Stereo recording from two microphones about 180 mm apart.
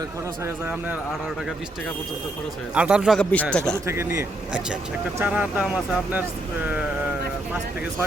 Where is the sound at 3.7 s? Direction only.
15° right (ahead or behind).